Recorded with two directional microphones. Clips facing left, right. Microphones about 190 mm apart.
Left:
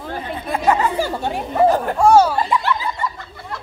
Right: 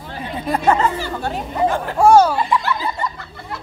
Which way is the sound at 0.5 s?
10° left (ahead or behind).